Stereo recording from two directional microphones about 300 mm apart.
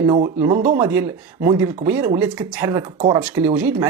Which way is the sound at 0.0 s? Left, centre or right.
Centre.